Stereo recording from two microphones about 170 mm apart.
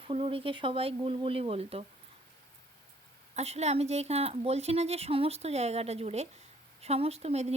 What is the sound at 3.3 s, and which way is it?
Speech, 40° right (ahead or behind).